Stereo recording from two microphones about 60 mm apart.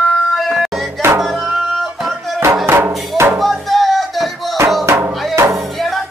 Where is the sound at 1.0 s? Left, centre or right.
Right.